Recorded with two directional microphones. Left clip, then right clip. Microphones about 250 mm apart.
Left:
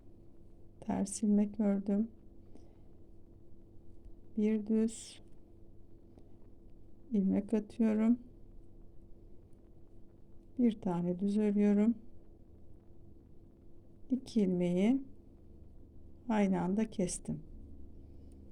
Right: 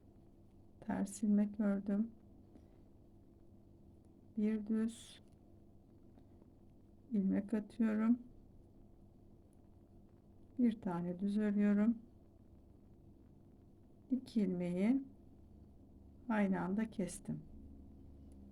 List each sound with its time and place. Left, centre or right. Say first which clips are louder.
0.8 s a woman's voice: left 4 dB; left
4.4 s speech: left 6 dB; left
7.1 s speech: left 5 dB; left
10.6 s speech: left 4 dB; left
14.1 s speech: left 5 dB; left
16.2 s speech: left 4 dB; left